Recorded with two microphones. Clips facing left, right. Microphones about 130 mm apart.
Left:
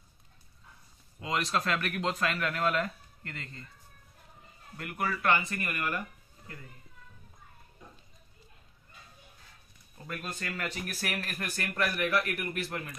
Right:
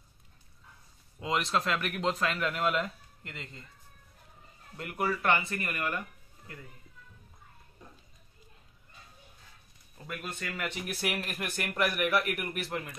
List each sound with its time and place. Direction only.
1.2 s speech: 20° right (ahead or behind)
4.7 s speech: 25° right (ahead or behind)
10.5 s a man's voice: 20° right (ahead or behind)